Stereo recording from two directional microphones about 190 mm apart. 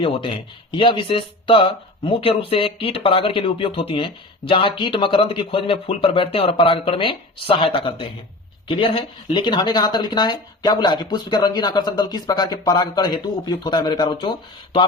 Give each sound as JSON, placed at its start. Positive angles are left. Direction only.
{"t": 0.0, "sound": "speech", "side_deg": 25}